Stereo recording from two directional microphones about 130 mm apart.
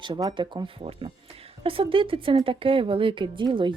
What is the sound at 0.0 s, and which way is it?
Speech, 35° right (ahead or behind).